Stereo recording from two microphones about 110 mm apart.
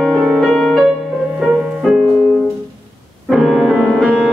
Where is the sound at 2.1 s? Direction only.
15° left (ahead or behind).